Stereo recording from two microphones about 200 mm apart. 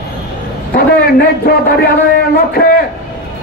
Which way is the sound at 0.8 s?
50° left (ahead or behind).